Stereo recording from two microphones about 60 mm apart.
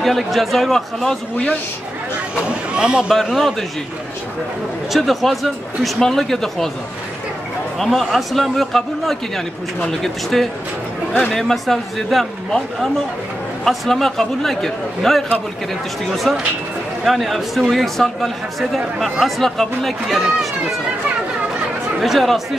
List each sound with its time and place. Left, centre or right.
0.0 s speech: centre
2.4 s speech: centre
3.3 s speech: centre
4.9 s speech: centre
7.8 s speech: centre
22.0 s speech: centre